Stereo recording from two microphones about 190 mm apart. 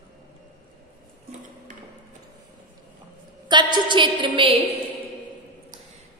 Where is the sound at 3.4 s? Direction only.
25° right (ahead or behind).